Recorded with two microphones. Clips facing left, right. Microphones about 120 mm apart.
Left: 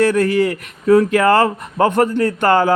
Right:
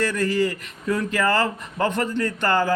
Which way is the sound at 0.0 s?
55° left (ahead or behind).